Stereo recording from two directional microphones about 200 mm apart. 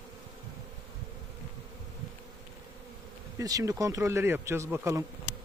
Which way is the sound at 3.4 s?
15° right (ahead or behind).